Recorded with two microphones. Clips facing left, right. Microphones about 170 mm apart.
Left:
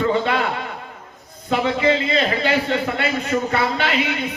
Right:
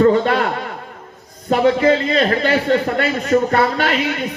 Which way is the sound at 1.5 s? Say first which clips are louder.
Right 5 dB; 45° right (ahead or behind).